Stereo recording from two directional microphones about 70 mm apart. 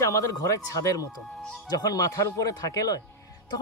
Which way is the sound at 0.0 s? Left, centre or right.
Left.